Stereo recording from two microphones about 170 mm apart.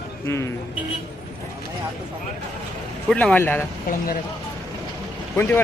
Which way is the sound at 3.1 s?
5° left (ahead or behind).